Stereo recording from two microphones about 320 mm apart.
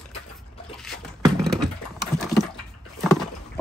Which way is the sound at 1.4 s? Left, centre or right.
Centre.